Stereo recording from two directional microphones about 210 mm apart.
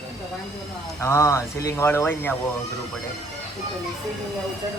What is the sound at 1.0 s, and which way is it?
Speech, 15° left (ahead or behind).